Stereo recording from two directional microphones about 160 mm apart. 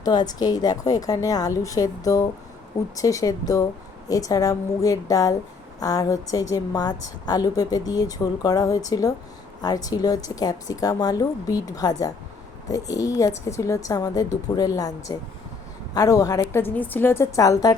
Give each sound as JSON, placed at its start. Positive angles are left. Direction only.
{"t": 0.0, "sound": "a woman's voice", "side_deg": 25}